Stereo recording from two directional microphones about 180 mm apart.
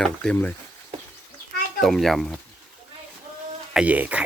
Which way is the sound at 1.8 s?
Centre (ahead or behind).